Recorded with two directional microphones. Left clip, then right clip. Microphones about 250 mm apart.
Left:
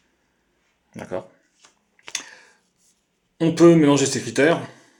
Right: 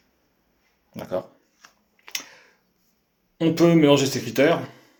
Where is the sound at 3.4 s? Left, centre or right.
Left.